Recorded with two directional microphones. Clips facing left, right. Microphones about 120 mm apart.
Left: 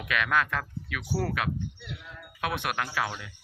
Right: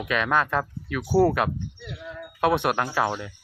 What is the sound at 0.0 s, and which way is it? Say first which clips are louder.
Speech: right 4 dB; 30° right (ahead or behind).